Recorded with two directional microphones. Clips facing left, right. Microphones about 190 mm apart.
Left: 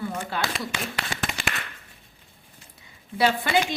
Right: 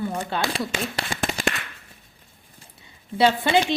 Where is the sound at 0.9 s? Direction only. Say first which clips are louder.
Right 4 dB; 40° right (ahead or behind).